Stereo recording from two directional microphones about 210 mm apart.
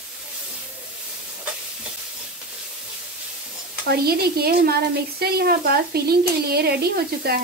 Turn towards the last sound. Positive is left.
turn(degrees=-50)  # may be behind; listen again after turning